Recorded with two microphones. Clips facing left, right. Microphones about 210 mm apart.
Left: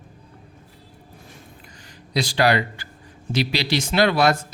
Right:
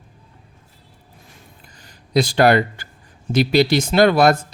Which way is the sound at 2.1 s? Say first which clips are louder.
Right 5 dB; 50° right (ahead or behind).